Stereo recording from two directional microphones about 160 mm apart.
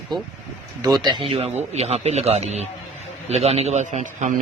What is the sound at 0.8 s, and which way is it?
A man's voice, 25° right (ahead or behind).